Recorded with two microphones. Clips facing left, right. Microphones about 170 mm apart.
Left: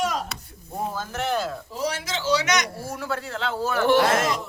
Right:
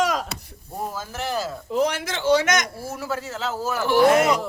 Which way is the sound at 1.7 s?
60° right (ahead or behind).